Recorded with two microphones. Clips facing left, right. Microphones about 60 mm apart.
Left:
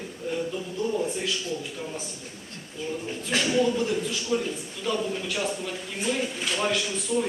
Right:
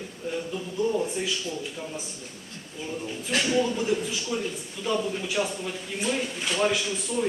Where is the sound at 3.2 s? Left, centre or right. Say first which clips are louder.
Left 1 dB; centre.